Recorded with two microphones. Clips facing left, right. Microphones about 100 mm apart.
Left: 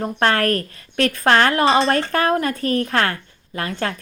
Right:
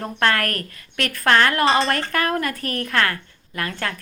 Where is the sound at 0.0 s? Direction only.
25° left (ahead or behind).